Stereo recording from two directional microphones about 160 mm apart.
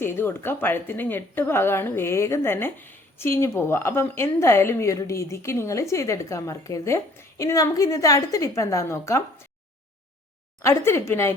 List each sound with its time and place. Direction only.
0.0 s a woman's voice: 15° left (ahead or behind)
10.6 s a woman's voice: 15° left (ahead or behind)